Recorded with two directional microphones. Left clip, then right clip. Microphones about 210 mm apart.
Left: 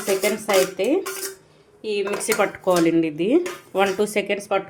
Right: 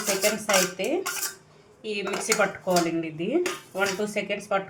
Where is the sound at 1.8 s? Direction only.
45° left (ahead or behind).